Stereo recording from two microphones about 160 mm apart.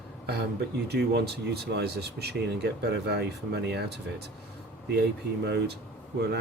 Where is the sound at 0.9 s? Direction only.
90° right.